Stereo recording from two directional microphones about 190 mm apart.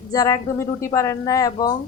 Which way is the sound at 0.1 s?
20° left (ahead or behind).